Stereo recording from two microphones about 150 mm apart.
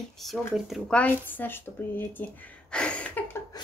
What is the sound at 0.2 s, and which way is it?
Speech, centre (ahead or behind).